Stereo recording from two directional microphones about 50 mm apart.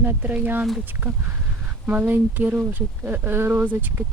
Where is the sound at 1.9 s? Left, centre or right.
Right.